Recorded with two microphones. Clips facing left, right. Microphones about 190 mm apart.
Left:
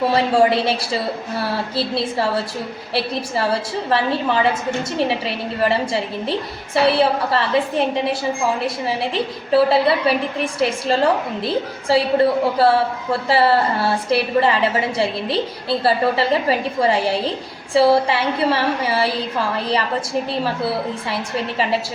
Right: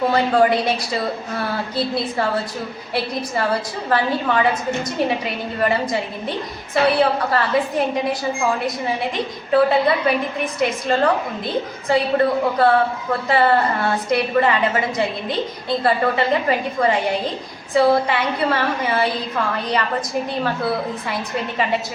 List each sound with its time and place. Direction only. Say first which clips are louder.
0.1 s a woman's voice: left 1 dB; 30° left (ahead or behind)
6.8 s a woman's voice: left 1 dB; 30° left (ahead or behind)
9.1 s a woman's voice: left 1 dB; 30° left (ahead or behind)